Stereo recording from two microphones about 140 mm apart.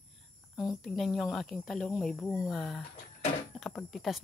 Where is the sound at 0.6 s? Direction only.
Centre (ahead or behind).